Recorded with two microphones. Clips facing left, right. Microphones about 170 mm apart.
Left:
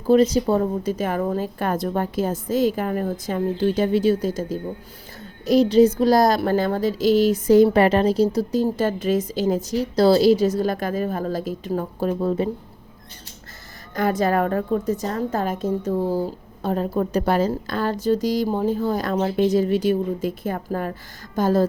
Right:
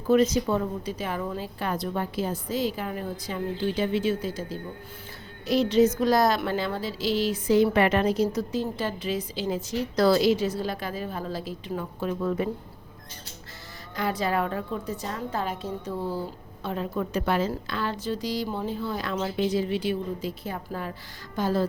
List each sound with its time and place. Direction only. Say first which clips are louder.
0.1 s a woman's voice: left 5 dB; 30° left (ahead or behind)
13.9 s a woman's voice: left 6 dB; 50° left (ahead or behind)